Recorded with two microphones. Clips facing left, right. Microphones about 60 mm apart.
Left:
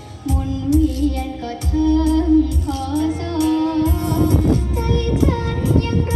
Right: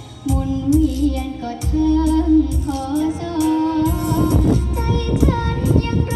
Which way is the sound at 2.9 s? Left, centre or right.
Left.